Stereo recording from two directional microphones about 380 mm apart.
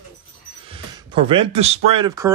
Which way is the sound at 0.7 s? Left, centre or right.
Centre.